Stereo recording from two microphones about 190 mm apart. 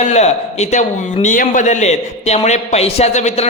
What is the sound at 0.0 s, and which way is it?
A man's voice, 35° left (ahead or behind).